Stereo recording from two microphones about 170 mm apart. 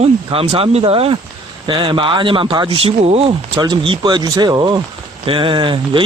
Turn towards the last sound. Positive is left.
turn(degrees=-30)  # may be behind; listen again after turning